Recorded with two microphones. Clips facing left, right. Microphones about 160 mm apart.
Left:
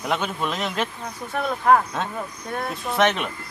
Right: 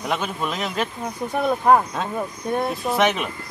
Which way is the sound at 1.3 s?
15° right (ahead or behind).